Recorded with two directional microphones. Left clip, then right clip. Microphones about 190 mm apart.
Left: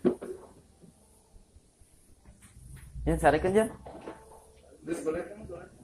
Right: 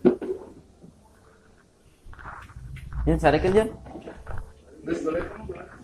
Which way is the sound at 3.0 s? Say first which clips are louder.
Right 4 dB; 30° left (ahead or behind).